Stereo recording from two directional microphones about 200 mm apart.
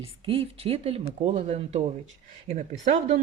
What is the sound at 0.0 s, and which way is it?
Speech, 30° right (ahead or behind).